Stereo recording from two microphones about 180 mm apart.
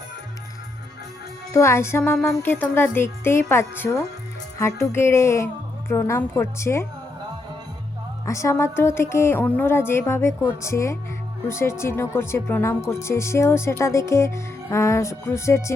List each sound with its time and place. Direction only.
1.5 s speech: 15° left (ahead or behind)
8.2 s speech: 15° left (ahead or behind)